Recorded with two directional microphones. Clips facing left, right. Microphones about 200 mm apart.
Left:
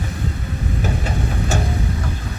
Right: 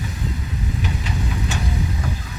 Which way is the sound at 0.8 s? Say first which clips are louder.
Left 4 dB; 45° left (ahead or behind).